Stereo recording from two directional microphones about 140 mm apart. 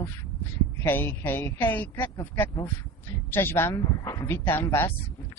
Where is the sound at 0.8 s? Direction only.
15° left (ahead or behind).